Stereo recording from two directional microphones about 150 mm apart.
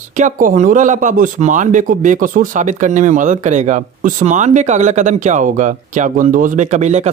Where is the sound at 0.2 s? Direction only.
60° right (ahead or behind).